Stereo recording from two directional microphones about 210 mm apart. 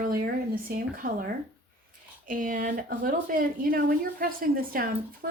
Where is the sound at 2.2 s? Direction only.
40° right (ahead or behind).